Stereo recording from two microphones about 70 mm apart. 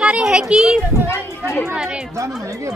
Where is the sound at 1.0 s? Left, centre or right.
Left.